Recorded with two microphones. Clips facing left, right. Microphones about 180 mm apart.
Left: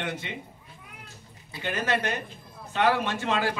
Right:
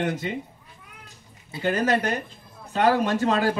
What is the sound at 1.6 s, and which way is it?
A man's voice, 40° right (ahead or behind).